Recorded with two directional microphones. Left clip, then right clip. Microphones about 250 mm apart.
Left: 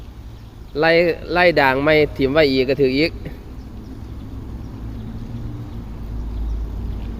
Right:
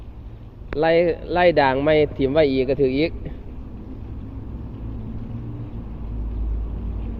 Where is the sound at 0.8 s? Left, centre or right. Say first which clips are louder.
Left 3 dB; centre.